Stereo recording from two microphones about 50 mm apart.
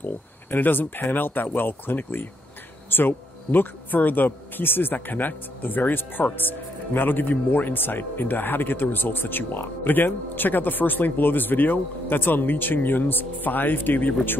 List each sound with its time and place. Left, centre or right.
0.0 s speech: left